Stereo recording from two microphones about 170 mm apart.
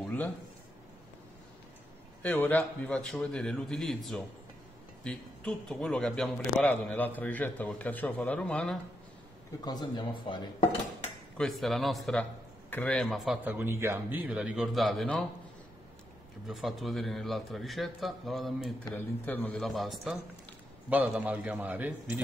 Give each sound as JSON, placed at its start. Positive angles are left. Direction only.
{"t": 2.2, "sound": "a man's voice", "side_deg": 10}
{"t": 9.7, "sound": "speech", "side_deg": 25}
{"t": 11.3, "sound": "a man's voice", "side_deg": 0}
{"t": 13.4, "sound": "a man's voice", "side_deg": -10}
{"t": 16.4, "sound": "a man's voice", "side_deg": 0}
{"t": 18.9, "sound": "a man's voice", "side_deg": 10}